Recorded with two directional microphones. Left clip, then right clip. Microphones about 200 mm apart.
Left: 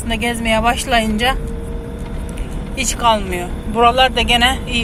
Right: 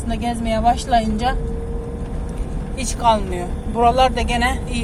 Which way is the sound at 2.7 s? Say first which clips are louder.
Left 2 dB; centre (ahead or behind).